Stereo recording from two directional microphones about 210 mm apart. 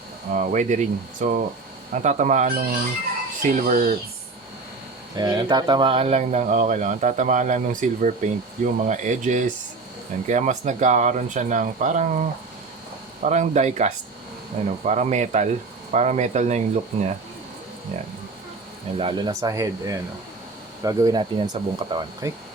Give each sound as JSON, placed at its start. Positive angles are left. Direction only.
{"t": 0.3, "sound": "speech", "side_deg": -35}
{"t": 5.1, "sound": "speech", "side_deg": -20}
{"t": 18.9, "sound": "speech", "side_deg": -25}